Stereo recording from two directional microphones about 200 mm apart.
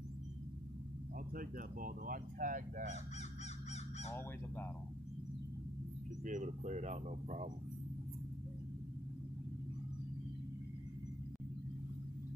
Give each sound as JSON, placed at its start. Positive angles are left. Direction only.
{"t": 1.3, "sound": "speech", "side_deg": -45}
{"t": 4.1, "sound": "speech", "side_deg": 10}
{"t": 6.2, "sound": "speech", "side_deg": -40}